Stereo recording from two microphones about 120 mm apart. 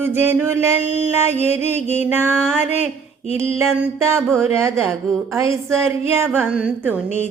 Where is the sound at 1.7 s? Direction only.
70° left (ahead or behind).